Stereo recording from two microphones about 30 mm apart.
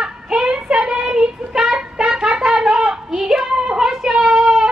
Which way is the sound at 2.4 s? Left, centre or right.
Right.